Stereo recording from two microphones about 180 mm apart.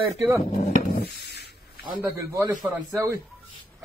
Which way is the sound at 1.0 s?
65° left (ahead or behind).